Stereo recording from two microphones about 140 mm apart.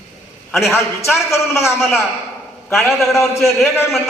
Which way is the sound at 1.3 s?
20° left (ahead or behind).